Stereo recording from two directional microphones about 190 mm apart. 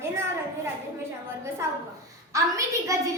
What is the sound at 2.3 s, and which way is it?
Speech, 15° right (ahead or behind).